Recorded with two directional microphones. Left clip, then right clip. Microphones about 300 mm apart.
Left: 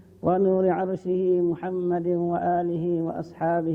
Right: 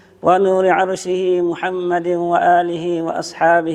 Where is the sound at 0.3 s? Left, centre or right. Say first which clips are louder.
Right 9 dB; centre.